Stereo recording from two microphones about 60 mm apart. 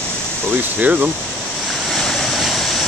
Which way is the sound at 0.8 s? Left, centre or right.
Right.